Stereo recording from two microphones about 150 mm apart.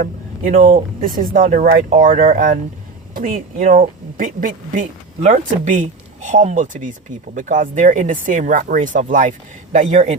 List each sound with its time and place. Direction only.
0.0 s a man's voice: 65° right (ahead or behind)